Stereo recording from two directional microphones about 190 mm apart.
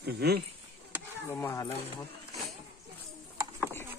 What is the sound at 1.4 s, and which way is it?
Speech, 15° left (ahead or behind).